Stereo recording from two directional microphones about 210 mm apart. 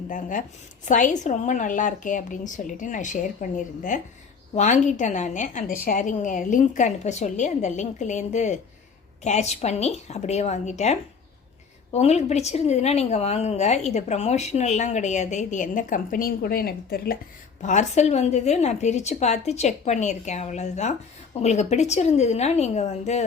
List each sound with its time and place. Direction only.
0.1 s a woman's voice: 40° left (ahead or behind)
11.9 s a woman's voice: 30° left (ahead or behind)
17.6 s a woman's voice: 35° left (ahead or behind)